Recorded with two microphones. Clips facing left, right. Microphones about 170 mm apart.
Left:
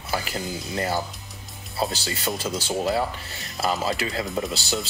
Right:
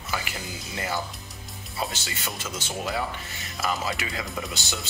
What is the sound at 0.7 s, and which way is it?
Speech, 35° left (ahead or behind).